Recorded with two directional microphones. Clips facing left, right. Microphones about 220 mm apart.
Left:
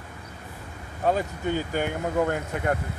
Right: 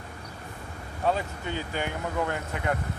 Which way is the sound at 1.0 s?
45° left (ahead or behind).